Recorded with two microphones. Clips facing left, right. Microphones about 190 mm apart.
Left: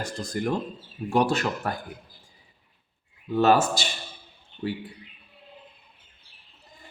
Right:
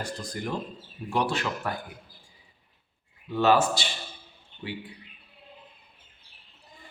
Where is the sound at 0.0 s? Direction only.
45° left (ahead or behind).